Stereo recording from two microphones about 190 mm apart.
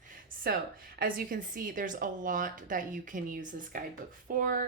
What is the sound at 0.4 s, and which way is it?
Speech, 50° right (ahead or behind).